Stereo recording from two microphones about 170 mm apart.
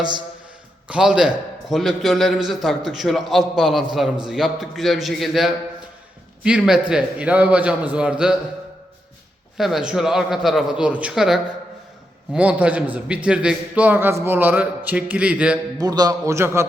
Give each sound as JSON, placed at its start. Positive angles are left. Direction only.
{"t": 0.9, "sound": "a man's voice", "side_deg": -5}
{"t": 9.6, "sound": "a man's voice", "side_deg": 0}
{"t": 15.8, "sound": "a man's voice", "side_deg": -25}